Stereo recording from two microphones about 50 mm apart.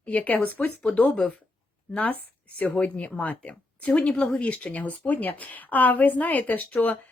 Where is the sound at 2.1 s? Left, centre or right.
Left.